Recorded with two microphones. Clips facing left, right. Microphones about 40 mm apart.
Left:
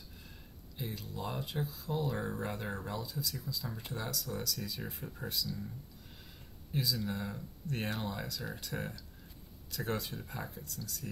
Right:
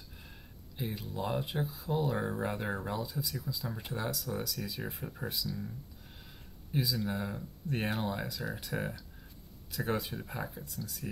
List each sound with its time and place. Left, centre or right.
0.7 s speech: centre
6.7 s speech: centre